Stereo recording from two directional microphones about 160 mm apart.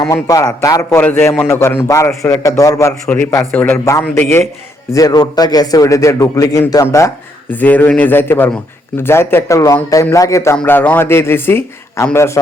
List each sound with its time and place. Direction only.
0.0 s a man's voice: 20° left (ahead or behind)
4.9 s a man's voice: 25° left (ahead or behind)